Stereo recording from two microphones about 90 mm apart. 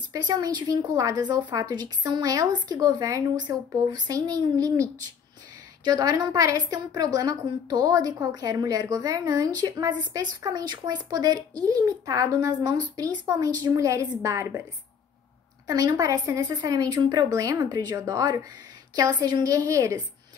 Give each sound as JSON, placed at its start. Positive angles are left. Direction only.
{"t": 0.1, "sound": "a woman's voice", "side_deg": -45}
{"t": 5.9, "sound": "a woman's voice", "side_deg": -45}
{"t": 15.6, "sound": "a woman's voice", "side_deg": -45}